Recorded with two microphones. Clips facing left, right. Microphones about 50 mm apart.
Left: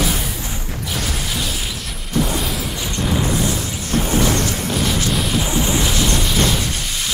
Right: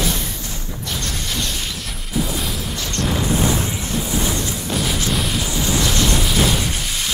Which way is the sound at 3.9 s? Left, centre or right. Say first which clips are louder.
Left 6 dB; left.